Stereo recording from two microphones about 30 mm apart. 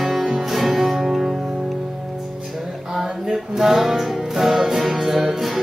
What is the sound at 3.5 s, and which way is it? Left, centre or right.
Music, centre.